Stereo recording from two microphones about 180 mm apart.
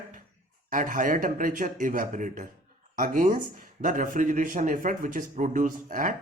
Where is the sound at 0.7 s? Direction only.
50° right (ahead or behind).